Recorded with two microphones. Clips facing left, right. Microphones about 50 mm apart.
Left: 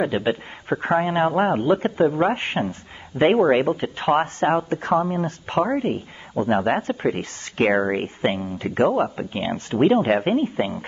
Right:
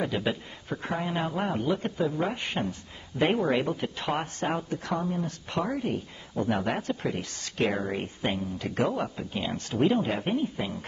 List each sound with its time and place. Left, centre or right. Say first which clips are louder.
0.0 s speech: left 7 dB; left
0.7 s speech: left 10 dB; left